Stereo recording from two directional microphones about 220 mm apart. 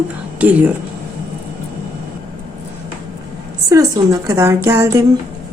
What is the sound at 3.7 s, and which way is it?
A woman's voice, 15° right (ahead or behind).